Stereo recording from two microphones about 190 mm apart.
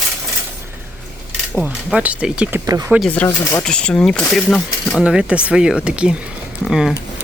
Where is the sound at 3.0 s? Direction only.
10° left (ahead or behind).